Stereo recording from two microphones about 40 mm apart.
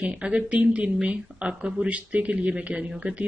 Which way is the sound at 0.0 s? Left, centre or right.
Right.